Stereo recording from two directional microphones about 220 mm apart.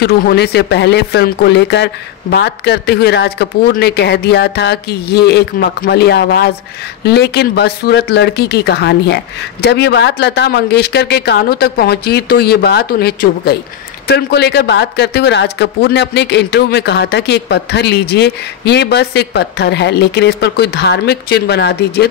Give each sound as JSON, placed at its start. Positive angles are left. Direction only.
{"t": 0.0, "sound": "speech", "side_deg": 50}